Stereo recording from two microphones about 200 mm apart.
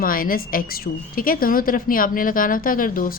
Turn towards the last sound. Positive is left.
turn(degrees=45)  # may be behind; listen again after turning